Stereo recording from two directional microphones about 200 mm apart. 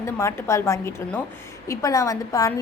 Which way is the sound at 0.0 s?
15° left (ahead or behind).